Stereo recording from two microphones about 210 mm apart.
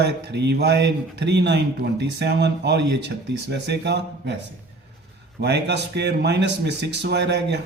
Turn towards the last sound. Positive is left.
turn(degrees=-55)  # may be behind; listen again after turning